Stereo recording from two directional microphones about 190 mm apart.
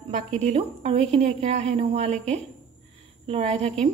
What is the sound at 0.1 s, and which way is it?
A woman's voice, 35° right (ahead or behind).